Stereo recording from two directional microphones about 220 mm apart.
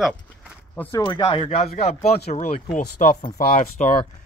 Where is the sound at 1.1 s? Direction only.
25° left (ahead or behind); by 3.9 s 40° left (ahead or behind).